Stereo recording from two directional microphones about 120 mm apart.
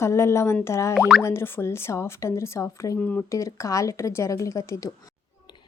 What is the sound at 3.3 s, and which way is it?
A woman's voice, 25° left (ahead or behind).